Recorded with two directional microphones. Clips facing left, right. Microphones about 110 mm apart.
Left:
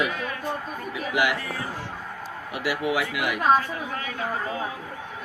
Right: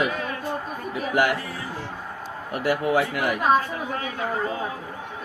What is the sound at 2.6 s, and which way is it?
Speech, 45° right (ahead or behind).